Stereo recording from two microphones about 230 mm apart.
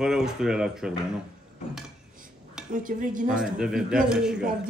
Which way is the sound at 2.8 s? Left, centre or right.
Right.